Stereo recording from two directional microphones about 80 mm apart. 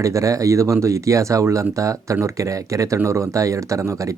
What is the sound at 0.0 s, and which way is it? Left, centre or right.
Speech, right.